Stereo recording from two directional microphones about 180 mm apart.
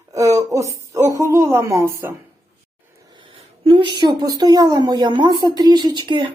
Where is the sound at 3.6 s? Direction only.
25° right (ahead or behind).